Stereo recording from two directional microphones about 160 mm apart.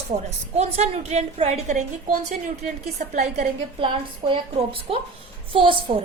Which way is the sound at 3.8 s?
30° right (ahead or behind).